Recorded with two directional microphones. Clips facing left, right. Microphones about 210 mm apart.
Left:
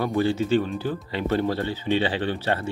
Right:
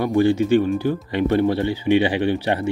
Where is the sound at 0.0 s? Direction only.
15° right (ahead or behind).